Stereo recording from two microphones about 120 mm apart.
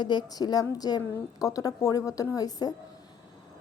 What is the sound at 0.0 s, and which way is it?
A woman's voice, 35° left (ahead or behind).